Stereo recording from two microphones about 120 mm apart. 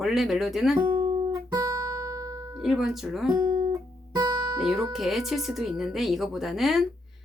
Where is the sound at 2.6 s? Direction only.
Centre (ahead or behind).